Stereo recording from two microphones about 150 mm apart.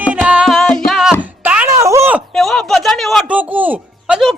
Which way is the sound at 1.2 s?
10° right (ahead or behind).